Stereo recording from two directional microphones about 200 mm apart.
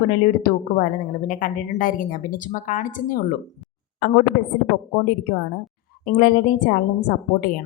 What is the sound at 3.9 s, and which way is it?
A woman's voice, 55° left (ahead or behind).